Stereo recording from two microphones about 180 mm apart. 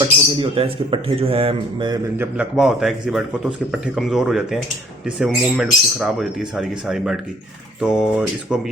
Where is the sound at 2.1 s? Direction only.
5° right (ahead or behind).